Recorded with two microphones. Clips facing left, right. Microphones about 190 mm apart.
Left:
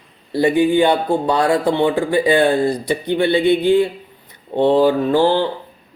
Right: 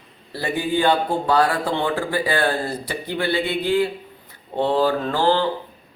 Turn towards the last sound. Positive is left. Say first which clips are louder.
# left 5 dB
turn(degrees=15)  # may be behind; listen again after turning